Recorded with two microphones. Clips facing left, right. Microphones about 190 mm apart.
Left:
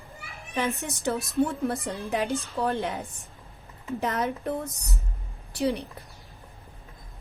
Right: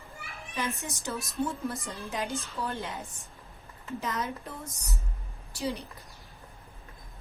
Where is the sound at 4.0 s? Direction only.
60° left (ahead or behind).